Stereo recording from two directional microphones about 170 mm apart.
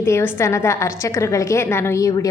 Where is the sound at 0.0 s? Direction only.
15° left (ahead or behind).